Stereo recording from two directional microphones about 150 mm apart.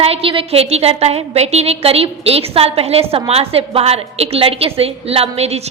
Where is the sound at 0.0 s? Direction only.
40° right (ahead or behind).